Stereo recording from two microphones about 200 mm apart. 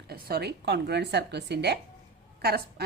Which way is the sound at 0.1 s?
50° right (ahead or behind).